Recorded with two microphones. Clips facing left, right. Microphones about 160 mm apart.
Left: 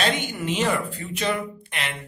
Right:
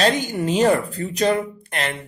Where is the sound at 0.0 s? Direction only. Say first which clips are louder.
Right 6 dB; 35° right (ahead or behind).